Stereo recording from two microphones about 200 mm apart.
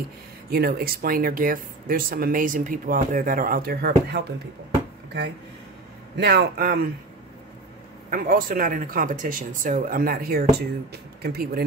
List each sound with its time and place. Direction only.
0.5 s speech: 50° right (ahead or behind)
6.1 s speech: 55° right (ahead or behind)
8.1 s speech: 45° right (ahead or behind)